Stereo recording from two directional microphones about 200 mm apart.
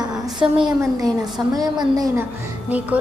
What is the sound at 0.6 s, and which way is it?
A woman's voice, 20° right (ahead or behind).